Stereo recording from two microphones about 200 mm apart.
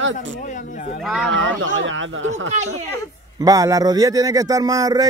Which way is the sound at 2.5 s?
35° right (ahead or behind).